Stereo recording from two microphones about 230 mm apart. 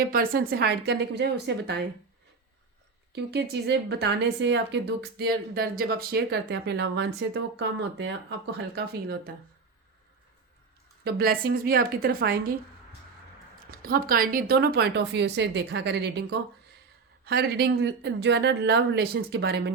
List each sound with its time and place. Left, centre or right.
0.0 s speech: right
3.2 s speech: right
11.0 s a woman's voice: right
13.7 s speech: right